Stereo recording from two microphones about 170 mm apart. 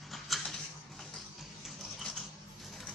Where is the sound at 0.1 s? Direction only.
Centre (ahead or behind).